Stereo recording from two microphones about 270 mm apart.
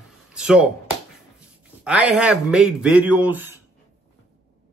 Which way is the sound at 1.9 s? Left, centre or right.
Centre.